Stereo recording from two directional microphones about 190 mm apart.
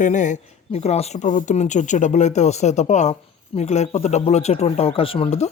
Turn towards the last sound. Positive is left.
turn(degrees=30)  # may be behind; listen again after turning